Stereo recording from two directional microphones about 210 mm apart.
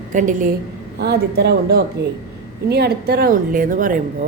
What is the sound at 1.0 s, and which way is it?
A woman's voice, 50° right (ahead or behind).